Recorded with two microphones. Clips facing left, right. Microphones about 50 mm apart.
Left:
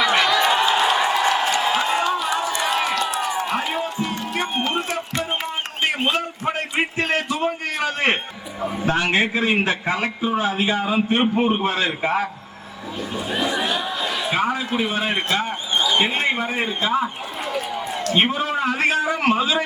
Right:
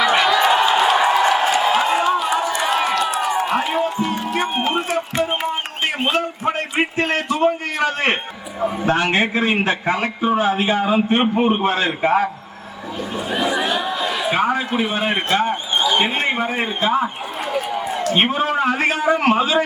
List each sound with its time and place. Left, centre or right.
0.0 s a sound: centre
3.3 s music: centre
5.8 s a sound: centre
8.6 s a man's voice: centre
17.5 s run: centre
18.3 s a man's voice: right